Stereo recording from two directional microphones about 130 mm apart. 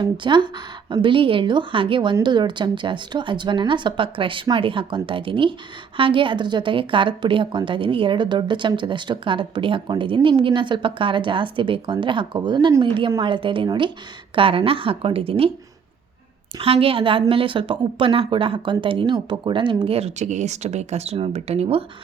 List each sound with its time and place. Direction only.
0.0 s a woman's voice: 35° right (ahead or behind)
16.6 s a woman's voice: 45° right (ahead or behind)